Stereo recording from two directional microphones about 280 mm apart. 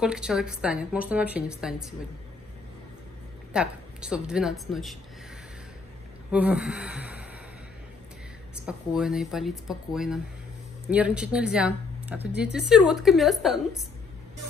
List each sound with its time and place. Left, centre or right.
0.0 s a woman's voice: centre
3.5 s a woman's voice: centre
6.3 s speech: centre
8.6 s a woman's voice: centre